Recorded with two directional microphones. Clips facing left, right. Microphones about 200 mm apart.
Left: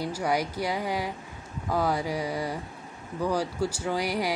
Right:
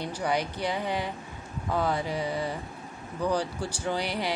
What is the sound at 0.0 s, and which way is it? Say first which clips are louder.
Speech: left 1 dB; 10° left (ahead or behind).